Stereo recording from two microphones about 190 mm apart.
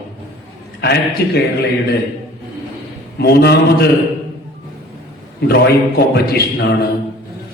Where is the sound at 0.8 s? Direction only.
60° left (ahead or behind).